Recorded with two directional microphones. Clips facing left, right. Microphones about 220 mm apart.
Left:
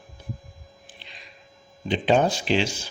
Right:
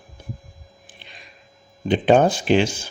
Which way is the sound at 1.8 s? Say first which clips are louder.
Right 5 dB; 50° right (ahead or behind).